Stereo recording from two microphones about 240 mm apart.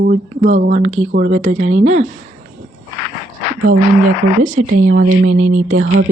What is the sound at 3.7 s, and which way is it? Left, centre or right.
Speech, right.